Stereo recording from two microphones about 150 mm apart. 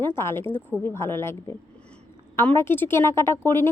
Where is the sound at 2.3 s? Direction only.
15° left (ahead or behind).